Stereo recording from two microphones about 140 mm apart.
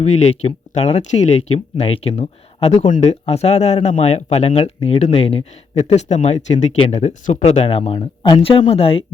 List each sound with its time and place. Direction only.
0.0 s speech: 55° left (ahead or behind)